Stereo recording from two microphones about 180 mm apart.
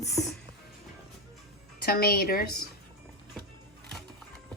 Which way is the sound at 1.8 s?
55° left (ahead or behind).